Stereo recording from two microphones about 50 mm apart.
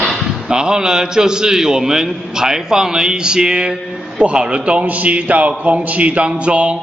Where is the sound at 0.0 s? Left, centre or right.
Centre.